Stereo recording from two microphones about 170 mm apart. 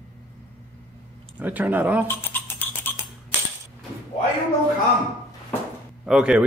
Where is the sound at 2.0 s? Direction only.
10° left (ahead or behind).